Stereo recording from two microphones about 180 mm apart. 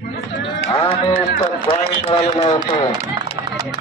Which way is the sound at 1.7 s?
35° left (ahead or behind).